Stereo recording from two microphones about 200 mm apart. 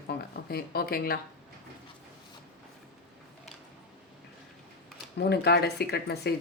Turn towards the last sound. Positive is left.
turn(degrees=55)  # may be behind; listen again after turning